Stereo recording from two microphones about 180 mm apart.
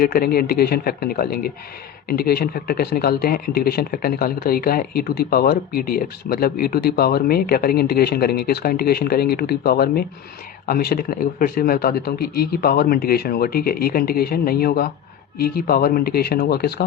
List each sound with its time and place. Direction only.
0.0 s speech: 55° left (ahead or behind)